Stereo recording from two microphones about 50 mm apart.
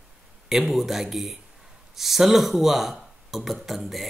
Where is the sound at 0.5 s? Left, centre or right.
Centre.